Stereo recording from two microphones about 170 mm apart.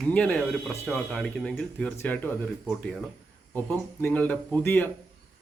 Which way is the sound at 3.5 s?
10° left (ahead or behind).